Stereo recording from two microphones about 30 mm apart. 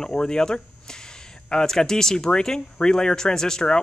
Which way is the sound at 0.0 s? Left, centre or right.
Left.